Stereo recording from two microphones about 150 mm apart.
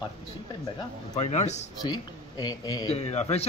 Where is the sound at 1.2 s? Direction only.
50° left (ahead or behind).